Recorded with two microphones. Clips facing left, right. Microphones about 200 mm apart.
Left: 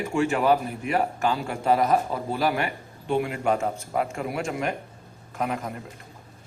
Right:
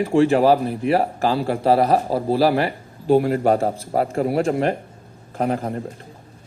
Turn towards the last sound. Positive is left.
turn(degrees=-40)  # may be behind; listen again after turning